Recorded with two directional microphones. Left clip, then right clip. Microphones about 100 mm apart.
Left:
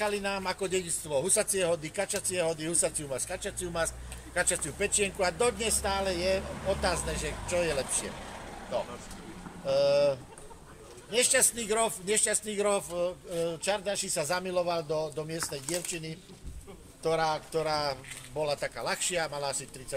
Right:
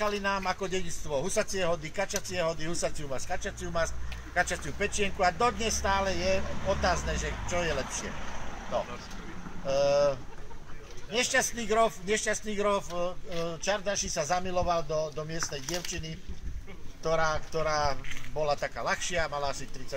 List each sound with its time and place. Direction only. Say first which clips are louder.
0.0 s speech: right 1 dB; 30° left (ahead or behind)
0.7 s speech: left 2 dB; 35° left (ahead or behind)
9.7 s speech: even; 25° left (ahead or behind)